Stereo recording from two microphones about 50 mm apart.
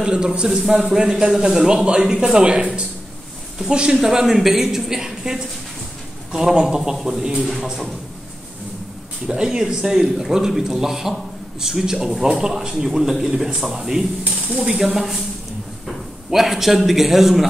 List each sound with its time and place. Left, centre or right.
0.0 s a man's voice: centre
9.3 s a man's voice: centre
16.3 s a man's voice: centre